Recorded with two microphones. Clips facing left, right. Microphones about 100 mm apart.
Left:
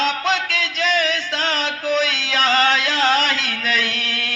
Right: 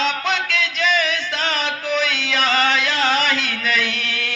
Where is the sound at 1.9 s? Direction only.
40° left (ahead or behind).